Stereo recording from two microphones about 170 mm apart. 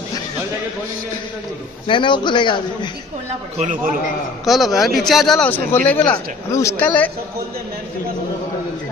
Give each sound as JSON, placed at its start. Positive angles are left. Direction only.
{"t": 1.9, "sound": "a man's voice", "side_deg": 30}
{"t": 3.5, "sound": "a man's voice", "side_deg": -45}
{"t": 4.5, "sound": "a man's voice", "side_deg": 0}